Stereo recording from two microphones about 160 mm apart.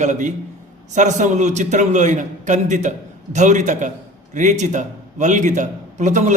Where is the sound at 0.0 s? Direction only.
50° right (ahead or behind).